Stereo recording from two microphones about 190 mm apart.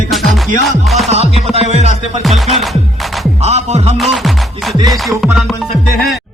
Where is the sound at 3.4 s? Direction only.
35° right (ahead or behind).